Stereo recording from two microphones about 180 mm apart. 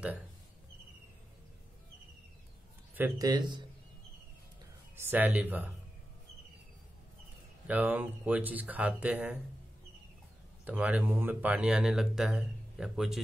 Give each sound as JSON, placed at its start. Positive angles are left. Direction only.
{"t": 2.9, "sound": "a man's voice", "side_deg": -15}
{"t": 4.9, "sound": "speech", "side_deg": -10}
{"t": 7.6, "sound": "speech", "side_deg": -10}
{"t": 10.6, "sound": "speech", "side_deg": -10}